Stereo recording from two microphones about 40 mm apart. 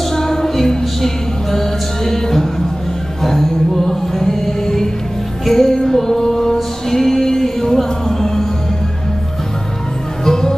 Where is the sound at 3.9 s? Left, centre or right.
Centre.